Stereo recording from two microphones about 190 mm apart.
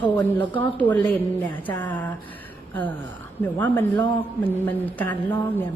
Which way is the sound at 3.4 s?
10° left (ahead or behind).